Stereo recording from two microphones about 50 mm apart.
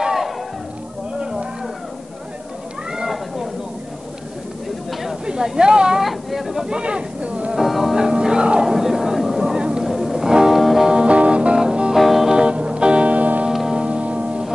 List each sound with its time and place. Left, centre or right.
0.0 s a sound: centre
5.2 s speech: centre
6.0 s speech: centre; by 7.5 s right
7.5 s music: centre
10.9 s music: right
11.9 s music: centre
12.4 s music: centre
13.5 s music: centre
13.7 s music: right